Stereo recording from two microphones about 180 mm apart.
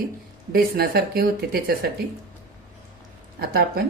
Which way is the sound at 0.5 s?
55° right (ahead or behind).